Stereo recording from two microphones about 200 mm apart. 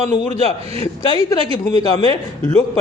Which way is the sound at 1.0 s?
25° left (ahead or behind).